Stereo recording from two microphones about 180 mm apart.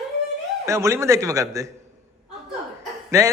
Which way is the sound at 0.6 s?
15° right (ahead or behind).